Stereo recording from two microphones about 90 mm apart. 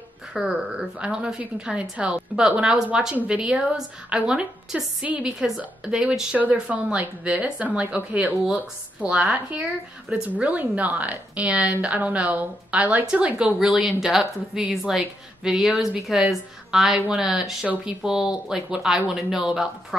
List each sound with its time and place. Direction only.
0.3 s a woman's voice: 5° right (ahead or behind)